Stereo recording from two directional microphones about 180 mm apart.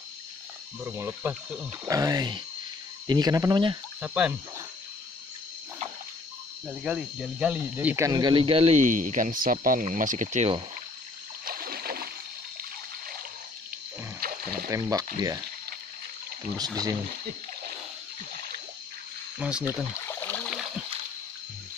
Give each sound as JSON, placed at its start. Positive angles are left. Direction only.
{"t": 0.8, "sound": "speech", "side_deg": -10}
{"t": 1.9, "sound": "speech", "side_deg": -20}
{"t": 4.0, "sound": "speech", "side_deg": -10}
{"t": 6.7, "sound": "speech", "side_deg": -5}
{"t": 8.1, "sound": "speech", "side_deg": -25}
{"t": 11.4, "sound": "splash", "side_deg": -55}
{"t": 14.2, "sound": "a sound", "side_deg": -55}
{"t": 14.7, "sound": "speech", "side_deg": -20}
{"t": 16.5, "sound": "speech", "side_deg": -20}
{"t": 17.1, "sound": "speech", "side_deg": -60}
{"t": 19.3, "sound": "speech", "side_deg": -5}
{"t": 20.1, "sound": "a sound", "side_deg": 10}